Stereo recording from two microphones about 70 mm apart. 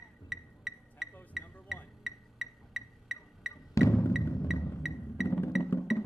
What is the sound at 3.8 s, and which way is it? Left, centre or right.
Music, left.